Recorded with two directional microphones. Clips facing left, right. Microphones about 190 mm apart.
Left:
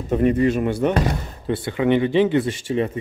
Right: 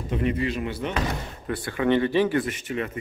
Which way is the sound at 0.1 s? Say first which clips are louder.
Left 8 dB; 45° left (ahead or behind).